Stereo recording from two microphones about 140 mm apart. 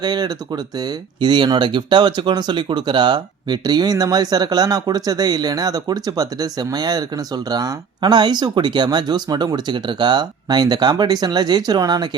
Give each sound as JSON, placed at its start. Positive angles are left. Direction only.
{"t": 0.0, "sound": "speech", "side_deg": -30}